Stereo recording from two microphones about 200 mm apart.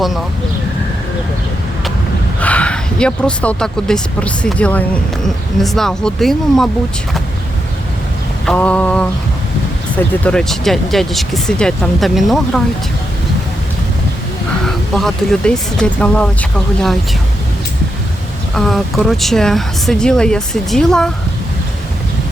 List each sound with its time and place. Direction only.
2.4 s speech: 5° left (ahead or behind)
8.4 s speech: 5° left (ahead or behind)
10.2 s speech: 5° left (ahead or behind)
14.6 s speech: centre (ahead or behind)
18.5 s speech: centre (ahead or behind)